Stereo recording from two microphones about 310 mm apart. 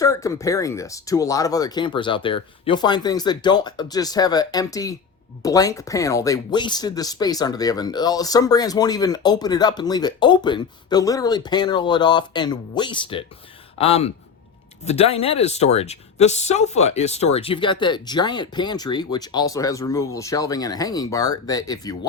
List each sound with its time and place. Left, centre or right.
0.0 s a man's voice: centre